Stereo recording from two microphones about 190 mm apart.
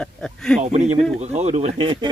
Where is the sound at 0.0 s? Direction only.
5° left (ahead or behind).